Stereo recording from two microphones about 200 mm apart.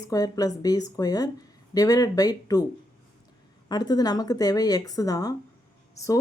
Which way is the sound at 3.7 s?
20° left (ahead or behind).